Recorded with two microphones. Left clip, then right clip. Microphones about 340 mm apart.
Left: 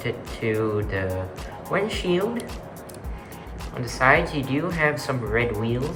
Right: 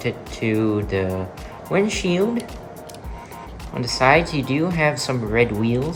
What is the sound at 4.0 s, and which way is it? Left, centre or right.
Speech, centre.